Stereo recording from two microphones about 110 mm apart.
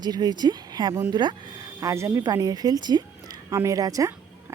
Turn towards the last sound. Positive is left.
turn(degrees=-30)  # may be behind; listen again after turning